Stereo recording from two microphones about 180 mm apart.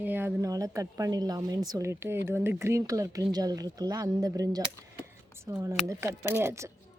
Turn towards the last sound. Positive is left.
turn(degrees=-15)  # may be behind; listen again after turning